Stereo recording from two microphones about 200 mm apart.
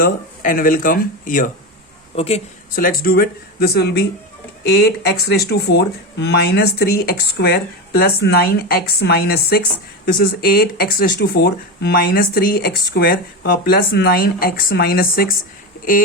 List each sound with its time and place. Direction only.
0.0 s speech: 45° left (ahead or behind)
2.1 s a woman's voice: 30° left (ahead or behind)
2.7 s speech: 45° left (ahead or behind)